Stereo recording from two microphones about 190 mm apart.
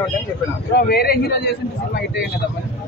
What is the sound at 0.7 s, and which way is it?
Speech, 55° left (ahead or behind).